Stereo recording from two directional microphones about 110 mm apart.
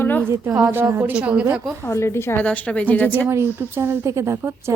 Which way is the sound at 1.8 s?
25° left (ahead or behind).